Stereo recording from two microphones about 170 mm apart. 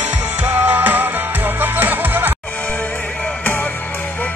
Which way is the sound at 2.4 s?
10° left (ahead or behind).